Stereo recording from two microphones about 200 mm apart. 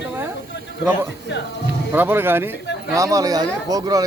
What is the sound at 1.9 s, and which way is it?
Speech, 10° right (ahead or behind).